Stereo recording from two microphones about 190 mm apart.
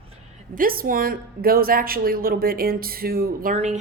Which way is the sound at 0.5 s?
50° right (ahead or behind).